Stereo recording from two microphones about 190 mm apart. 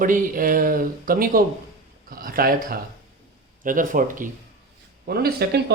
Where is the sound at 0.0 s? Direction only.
45° right (ahead or behind).